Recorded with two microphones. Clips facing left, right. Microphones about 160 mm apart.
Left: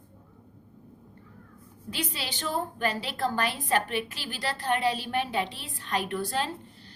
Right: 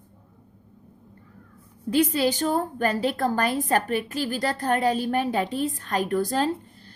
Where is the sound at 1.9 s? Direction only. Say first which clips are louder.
Right 14 dB; 45° right (ahead or behind).